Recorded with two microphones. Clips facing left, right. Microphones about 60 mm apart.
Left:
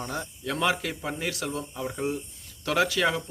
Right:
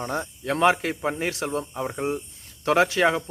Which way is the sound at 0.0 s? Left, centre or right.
Right.